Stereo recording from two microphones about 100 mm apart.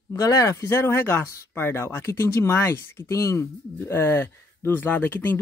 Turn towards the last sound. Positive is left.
turn(degrees=20)  # may be behind; listen again after turning